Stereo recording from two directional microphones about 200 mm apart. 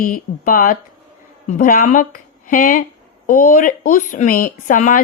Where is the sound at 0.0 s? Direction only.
45° left (ahead or behind).